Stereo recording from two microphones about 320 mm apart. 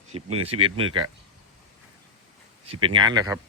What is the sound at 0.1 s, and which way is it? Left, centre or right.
Speech, centre.